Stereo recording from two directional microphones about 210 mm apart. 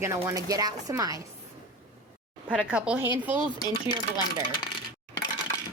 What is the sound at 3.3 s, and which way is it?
Speech, 25° left (ahead or behind).